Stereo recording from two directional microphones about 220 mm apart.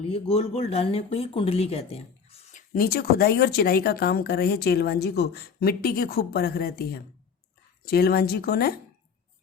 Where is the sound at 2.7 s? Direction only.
45° left (ahead or behind).